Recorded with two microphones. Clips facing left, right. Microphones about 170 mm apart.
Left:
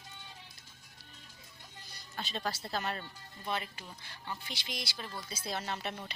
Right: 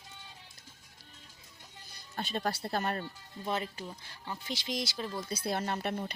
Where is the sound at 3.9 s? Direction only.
10° right (ahead or behind).